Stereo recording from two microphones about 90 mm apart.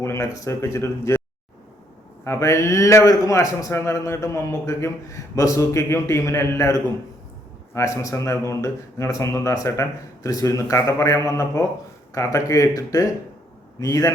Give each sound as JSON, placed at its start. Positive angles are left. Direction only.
{"t": 0.0, "sound": "a man's voice", "side_deg": 30}
{"t": 2.2, "sound": "a man's voice", "side_deg": 30}